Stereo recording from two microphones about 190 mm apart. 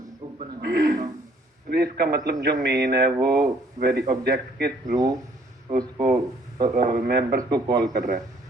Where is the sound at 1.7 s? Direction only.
55° right (ahead or behind).